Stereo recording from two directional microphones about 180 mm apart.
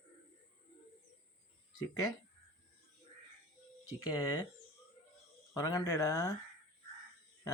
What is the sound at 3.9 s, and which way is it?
Speech, 20° left (ahead or behind).